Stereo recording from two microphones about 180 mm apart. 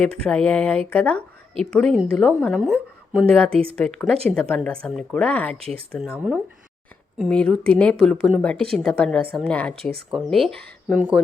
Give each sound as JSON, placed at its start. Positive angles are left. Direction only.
{"t": 0.3, "sound": "a woman's voice", "side_deg": 5}
{"t": 3.5, "sound": "speech", "side_deg": -30}
{"t": 3.8, "sound": "a woman's voice", "side_deg": 5}
{"t": 5.5, "sound": "speech", "side_deg": -35}
{"t": 5.9, "sound": "a woman's voice", "side_deg": -5}